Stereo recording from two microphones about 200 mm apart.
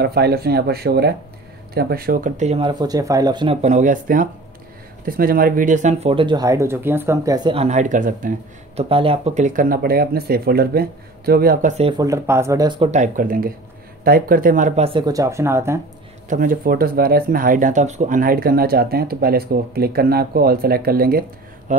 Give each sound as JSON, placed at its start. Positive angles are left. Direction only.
{"t": 0.0, "sound": "speech", "side_deg": -50}
{"t": 3.6, "sound": "speech", "side_deg": -40}
{"t": 8.7, "sound": "speech", "side_deg": -30}
{"t": 12.0, "sound": "speech", "side_deg": -15}
{"t": 12.9, "sound": "speech", "side_deg": -40}
{"t": 14.9, "sound": "speech", "side_deg": -20}
{"t": 16.3, "sound": "speech", "side_deg": -45}